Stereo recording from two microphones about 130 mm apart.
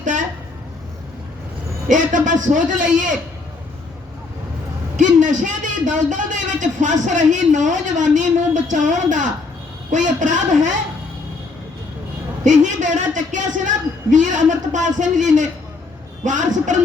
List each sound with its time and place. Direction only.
1.9 s a man's voice: 75° right (ahead or behind)
4.9 s a man's voice: 70° right (ahead or behind)
12.5 s a man's voice: 70° right (ahead or behind)